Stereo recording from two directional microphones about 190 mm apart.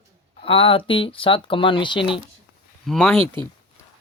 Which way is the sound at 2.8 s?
5° left (ahead or behind).